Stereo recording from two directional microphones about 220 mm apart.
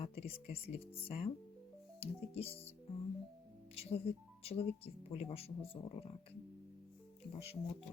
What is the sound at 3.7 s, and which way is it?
Speech, 25° left (ahead or behind).